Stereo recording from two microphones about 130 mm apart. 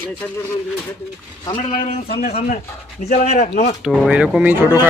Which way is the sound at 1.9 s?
50° left (ahead or behind).